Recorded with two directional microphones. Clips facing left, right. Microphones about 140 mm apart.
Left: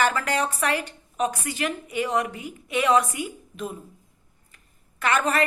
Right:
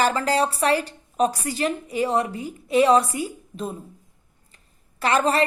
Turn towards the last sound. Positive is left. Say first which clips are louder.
# right 3 dB
turn(degrees=-30)  # may be behind; listen again after turning